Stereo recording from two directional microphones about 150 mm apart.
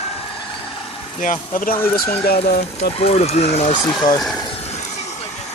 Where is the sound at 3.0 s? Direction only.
45° left (ahead or behind).